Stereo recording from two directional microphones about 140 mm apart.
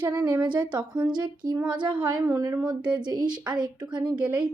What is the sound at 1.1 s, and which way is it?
Speech, 30° right (ahead or behind).